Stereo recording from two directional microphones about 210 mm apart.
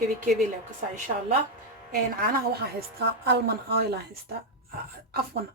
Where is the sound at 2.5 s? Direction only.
50° right (ahead or behind).